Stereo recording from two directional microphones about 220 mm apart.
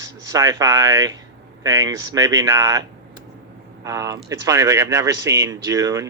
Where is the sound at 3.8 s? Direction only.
15° right (ahead or behind).